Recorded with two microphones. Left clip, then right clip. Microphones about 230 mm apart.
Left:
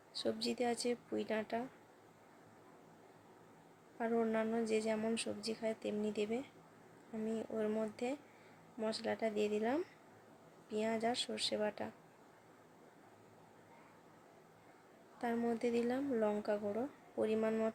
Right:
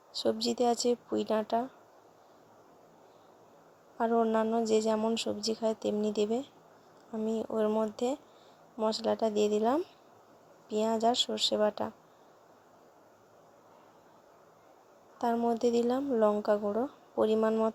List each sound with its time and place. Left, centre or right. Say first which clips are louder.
0.1 s speech: right 8 dB; right
3.9 s a woman's voice: right 9 dB; right
15.2 s speech: right 9 dB; right